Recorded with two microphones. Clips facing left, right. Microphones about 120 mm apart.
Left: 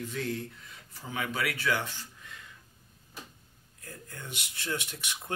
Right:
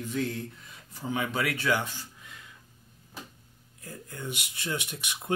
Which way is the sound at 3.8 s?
15° right (ahead or behind).